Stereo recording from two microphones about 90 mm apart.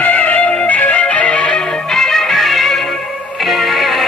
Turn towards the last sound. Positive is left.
turn(degrees=0)  # may be behind; listen again after turning